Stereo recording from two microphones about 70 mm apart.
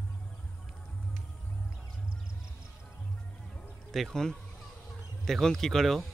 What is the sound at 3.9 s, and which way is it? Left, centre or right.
Speech, centre.